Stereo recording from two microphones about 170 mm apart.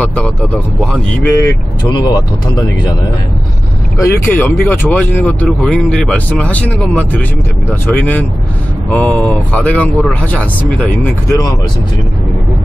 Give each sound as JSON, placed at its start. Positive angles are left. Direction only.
{"t": 0.0, "sound": "speech", "side_deg": 5}
{"t": 1.3, "sound": "speech", "side_deg": 20}
{"t": 4.0, "sound": "speech", "side_deg": 10}